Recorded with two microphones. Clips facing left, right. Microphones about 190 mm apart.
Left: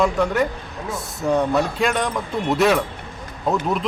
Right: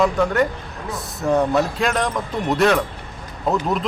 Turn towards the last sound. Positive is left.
turn(degrees=0)  # may be behind; listen again after turning